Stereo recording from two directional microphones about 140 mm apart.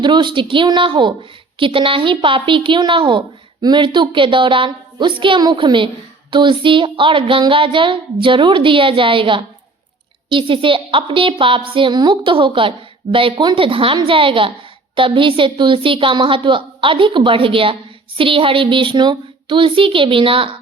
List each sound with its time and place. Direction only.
0.0 s a woman's voice: 35° right (ahead or behind)